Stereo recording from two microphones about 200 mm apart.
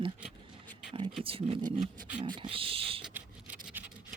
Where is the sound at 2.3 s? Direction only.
25° right (ahead or behind).